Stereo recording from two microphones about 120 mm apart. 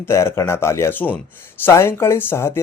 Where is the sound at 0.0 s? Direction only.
20° left (ahead or behind).